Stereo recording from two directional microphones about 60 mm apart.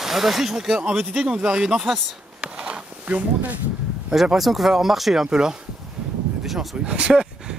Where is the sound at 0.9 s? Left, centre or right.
Centre.